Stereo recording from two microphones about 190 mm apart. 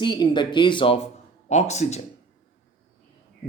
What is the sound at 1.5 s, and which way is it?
Speech, 35° left (ahead or behind).